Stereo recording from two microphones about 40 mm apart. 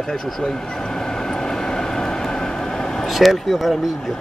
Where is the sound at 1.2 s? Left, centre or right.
Centre.